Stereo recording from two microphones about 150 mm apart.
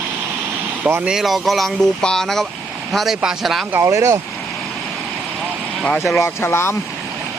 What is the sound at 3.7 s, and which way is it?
Speech, 20° right (ahead or behind).